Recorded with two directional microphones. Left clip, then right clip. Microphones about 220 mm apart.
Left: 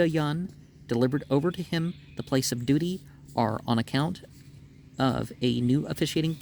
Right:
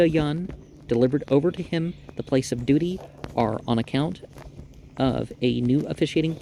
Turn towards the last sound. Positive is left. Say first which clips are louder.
# right 5 dB
turn(degrees=35)  # may be behind; listen again after turning